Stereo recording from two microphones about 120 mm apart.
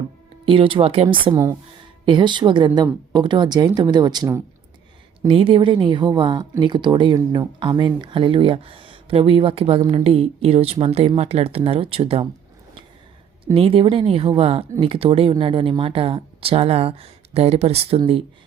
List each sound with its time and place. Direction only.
0.4 s speech: 45° right (ahead or behind)
1.3 s speech: 25° right (ahead or behind)
2.0 s speech: 40° right (ahead or behind)
5.3 s speech: 50° right (ahead or behind)
13.4 s speech: 50° right (ahead or behind)